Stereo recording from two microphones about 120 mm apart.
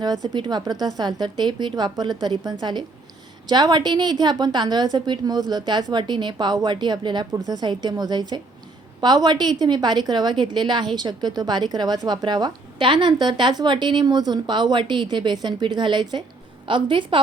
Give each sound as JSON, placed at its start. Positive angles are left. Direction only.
{"t": 0.3, "sound": "a woman's voice", "side_deg": -35}